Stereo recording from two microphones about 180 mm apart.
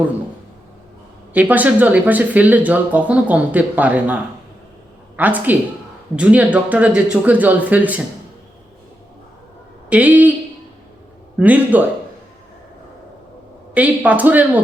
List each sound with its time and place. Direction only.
1.3 s speech: 10° right (ahead or behind)
9.9 s speech: 10° right (ahead or behind)
11.3 s speech: 10° right (ahead or behind)
13.7 s speech: 10° right (ahead or behind)